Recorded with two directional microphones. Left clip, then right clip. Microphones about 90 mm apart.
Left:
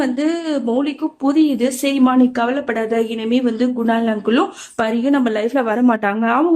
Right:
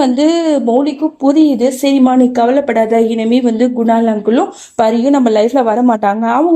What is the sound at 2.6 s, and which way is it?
A woman's voice, 30° right (ahead or behind).